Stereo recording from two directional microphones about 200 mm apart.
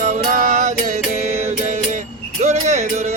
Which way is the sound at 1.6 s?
40° right (ahead or behind).